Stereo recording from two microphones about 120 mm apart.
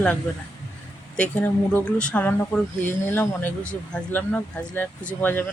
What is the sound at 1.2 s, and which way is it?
Speech, 15° left (ahead or behind).